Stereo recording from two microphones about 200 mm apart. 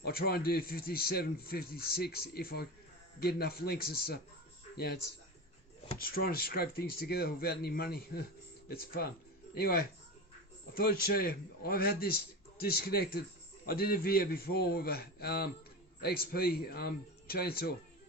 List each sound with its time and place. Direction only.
0.0 s speech: 50° left (ahead or behind)
6.0 s speech: 45° left (ahead or behind)